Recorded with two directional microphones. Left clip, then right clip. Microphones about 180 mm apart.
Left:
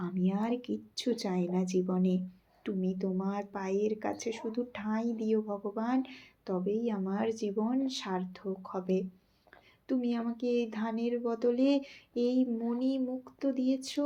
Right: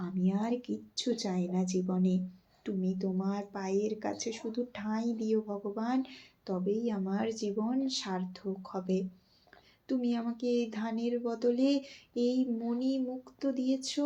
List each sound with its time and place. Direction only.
0.0 s a woman's voice: 45° left (ahead or behind)